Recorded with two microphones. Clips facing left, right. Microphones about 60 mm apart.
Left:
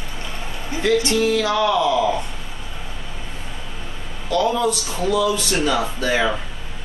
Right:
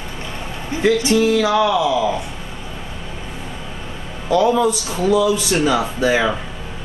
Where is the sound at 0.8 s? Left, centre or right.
Centre.